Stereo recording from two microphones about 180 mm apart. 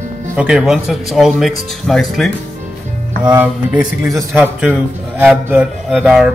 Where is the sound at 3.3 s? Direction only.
10° right (ahead or behind).